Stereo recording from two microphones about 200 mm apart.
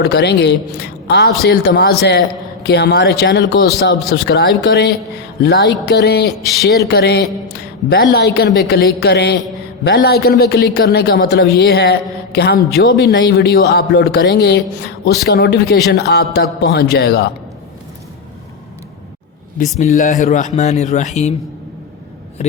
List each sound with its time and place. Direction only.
0.0 s a man's voice: 55° left (ahead or behind)
19.8 s a man's voice: 35° left (ahead or behind)